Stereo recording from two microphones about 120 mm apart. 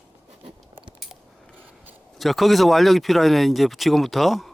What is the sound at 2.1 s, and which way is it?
Speech, centre (ahead or behind).